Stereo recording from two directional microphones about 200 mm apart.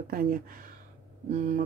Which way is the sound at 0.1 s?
45° right (ahead or behind).